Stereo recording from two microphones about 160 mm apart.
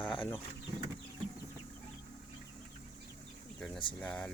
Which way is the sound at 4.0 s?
5° left (ahead or behind).